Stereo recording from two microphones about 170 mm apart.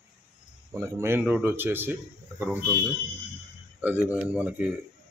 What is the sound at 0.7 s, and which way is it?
A man's voice, 15° right (ahead or behind).